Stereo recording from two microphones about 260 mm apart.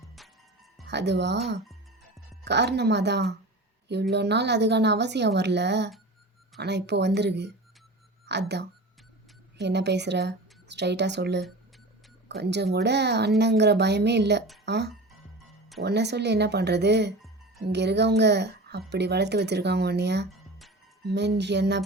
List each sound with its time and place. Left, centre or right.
0.2 s music: centre
0.9 s speech: right
2.4 s a woman's voice: right